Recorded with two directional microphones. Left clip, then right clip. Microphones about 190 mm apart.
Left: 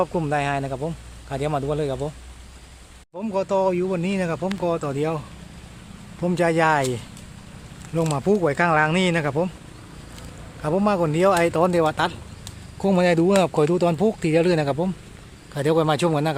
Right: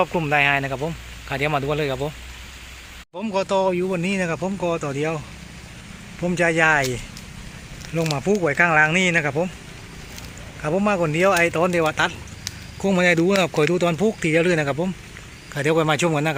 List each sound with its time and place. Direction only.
0.0 s speech: centre (ahead or behind)
3.2 s speech: 5° left (ahead or behind)
6.2 s speech: 10° left (ahead or behind)
8.1 s speech: 15° left (ahead or behind)
10.6 s speech: 10° left (ahead or behind)